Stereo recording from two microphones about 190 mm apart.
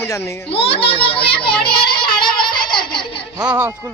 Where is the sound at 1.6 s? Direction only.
55° left (ahead or behind).